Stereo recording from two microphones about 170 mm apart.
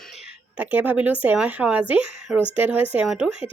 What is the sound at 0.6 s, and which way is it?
Speech, 10° right (ahead or behind).